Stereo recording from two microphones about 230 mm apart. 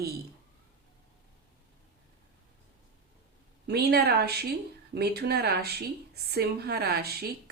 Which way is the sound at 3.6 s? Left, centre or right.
Right.